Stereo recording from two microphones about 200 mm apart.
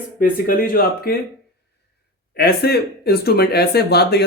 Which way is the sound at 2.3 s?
50° left (ahead or behind).